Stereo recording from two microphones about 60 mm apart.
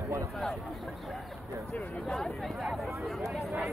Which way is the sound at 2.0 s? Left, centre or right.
Centre.